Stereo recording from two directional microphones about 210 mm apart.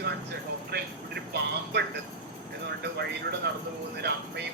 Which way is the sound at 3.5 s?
50° right (ahead or behind).